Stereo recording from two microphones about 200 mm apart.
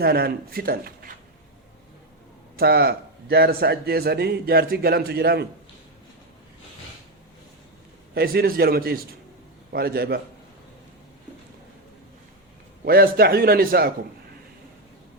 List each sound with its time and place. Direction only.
0.0 s a man's voice: 50° right (ahead or behind)
2.6 s a man's voice: 50° right (ahead or behind)
8.1 s a man's voice: 50° right (ahead or behind)
12.8 s a man's voice: 50° right (ahead or behind)